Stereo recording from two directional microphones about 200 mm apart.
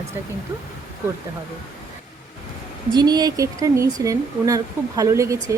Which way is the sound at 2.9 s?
20° right (ahead or behind).